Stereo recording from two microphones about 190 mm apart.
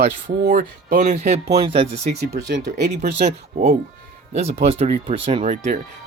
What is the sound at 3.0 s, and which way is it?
Speech, 35° right (ahead or behind).